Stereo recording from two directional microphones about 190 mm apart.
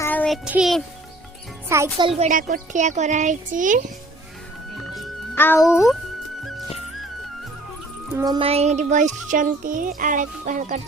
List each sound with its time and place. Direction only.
0.0 s a sound: 10° left (ahead or behind)
0.4 s a child's voice: 5° right (ahead or behind)
1.7 s speech: 15° right (ahead or behind)
2.0 s speech: 35° right (ahead or behind)
5.3 s speech: 10° left (ahead or behind)
8.1 s speech: 20° right (ahead or behind); by 10.8 s 40° right (ahead or behind)